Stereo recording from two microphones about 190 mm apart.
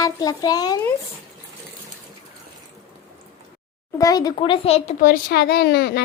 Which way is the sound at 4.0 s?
20° left (ahead or behind).